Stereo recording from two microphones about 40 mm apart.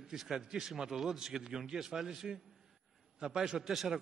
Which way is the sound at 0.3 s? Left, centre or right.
Centre.